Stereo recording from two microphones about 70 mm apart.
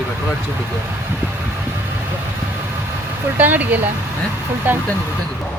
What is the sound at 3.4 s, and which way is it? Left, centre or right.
Speech, right.